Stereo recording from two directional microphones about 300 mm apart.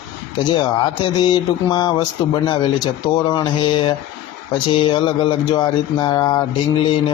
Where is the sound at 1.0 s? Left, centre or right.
Centre.